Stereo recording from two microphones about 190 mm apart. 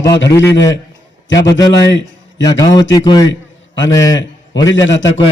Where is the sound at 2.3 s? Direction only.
20° left (ahead or behind).